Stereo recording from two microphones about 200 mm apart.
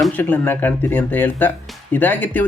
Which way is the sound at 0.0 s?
10° left (ahead or behind).